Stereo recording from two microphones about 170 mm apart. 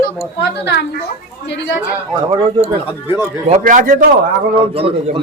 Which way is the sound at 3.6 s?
50° right (ahead or behind).